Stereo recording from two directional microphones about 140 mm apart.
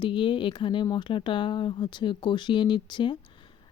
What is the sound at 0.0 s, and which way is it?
Speech, 35° left (ahead or behind).